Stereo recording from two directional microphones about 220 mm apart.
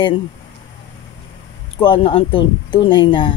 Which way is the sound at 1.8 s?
25° left (ahead or behind).